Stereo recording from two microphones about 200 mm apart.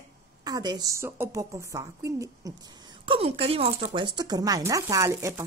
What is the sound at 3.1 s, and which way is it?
Speech, 30° right (ahead or behind).